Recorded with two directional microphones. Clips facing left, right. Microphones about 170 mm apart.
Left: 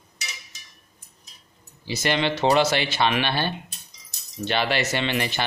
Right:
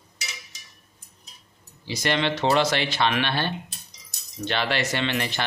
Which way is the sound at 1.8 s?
5° left (ahead or behind).